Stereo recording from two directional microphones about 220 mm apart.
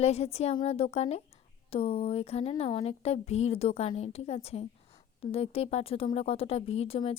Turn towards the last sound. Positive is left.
turn(degrees=25)  # may be behind; listen again after turning